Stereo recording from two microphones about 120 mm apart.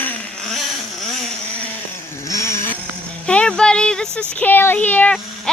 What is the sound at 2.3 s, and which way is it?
Vehicle, 25° left (ahead or behind).